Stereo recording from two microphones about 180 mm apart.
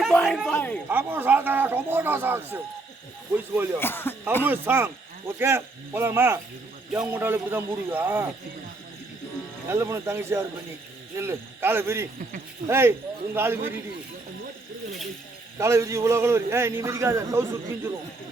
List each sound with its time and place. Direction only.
0.1 s a sound: 5° left (ahead or behind)
0.5 s speech: 10° left (ahead or behind)
0.9 s a man's voice: 10° right (ahead or behind)
3.8 s speech: 10° left (ahead or behind)
4.4 s a man's voice: 10° right (ahead or behind)
9.6 s a man's voice: 15° right (ahead or behind)
15.5 s a man's voice: 15° right (ahead or behind)